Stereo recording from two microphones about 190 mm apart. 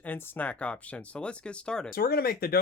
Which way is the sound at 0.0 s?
10° left (ahead or behind).